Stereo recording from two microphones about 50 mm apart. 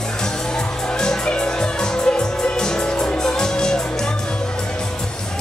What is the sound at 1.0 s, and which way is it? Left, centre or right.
Music, centre.